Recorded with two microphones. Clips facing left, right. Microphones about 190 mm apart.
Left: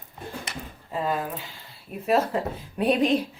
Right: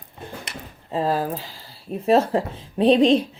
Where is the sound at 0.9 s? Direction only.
30° right (ahead or behind).